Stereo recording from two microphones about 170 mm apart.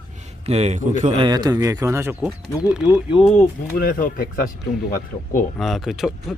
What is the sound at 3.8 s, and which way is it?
Speech, 55° left (ahead or behind).